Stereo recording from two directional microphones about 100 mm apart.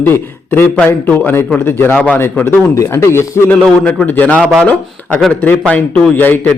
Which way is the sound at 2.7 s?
30° left (ahead or behind).